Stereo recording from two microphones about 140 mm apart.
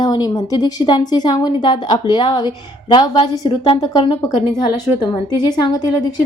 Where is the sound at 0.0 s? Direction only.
30° left (ahead or behind).